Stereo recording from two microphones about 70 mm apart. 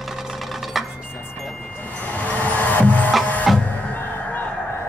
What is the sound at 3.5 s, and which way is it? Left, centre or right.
Music, centre.